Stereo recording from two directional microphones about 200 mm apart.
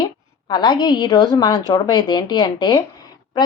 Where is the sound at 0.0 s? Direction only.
20° left (ahead or behind).